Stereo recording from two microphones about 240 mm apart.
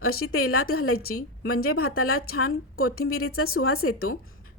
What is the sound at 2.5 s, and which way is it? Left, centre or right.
Speech, left.